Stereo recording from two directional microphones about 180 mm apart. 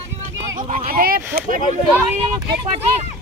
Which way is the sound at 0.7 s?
50° right (ahead or behind).